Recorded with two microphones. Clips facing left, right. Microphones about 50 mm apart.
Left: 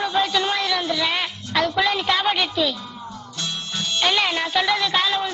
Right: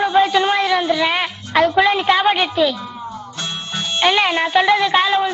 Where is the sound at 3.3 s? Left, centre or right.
Right.